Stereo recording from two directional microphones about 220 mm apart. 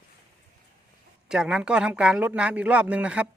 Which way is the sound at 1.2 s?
5° right (ahead or behind).